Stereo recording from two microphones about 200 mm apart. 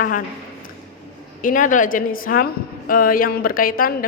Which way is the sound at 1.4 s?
40° left (ahead or behind).